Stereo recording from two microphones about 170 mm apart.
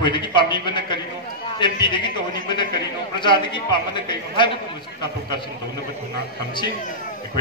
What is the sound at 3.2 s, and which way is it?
A man's voice, 30° left (ahead or behind).